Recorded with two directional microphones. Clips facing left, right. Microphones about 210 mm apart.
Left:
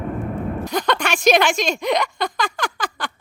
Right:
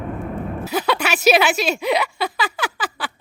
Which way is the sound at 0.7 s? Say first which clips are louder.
Right 1 dB; 5° right (ahead or behind).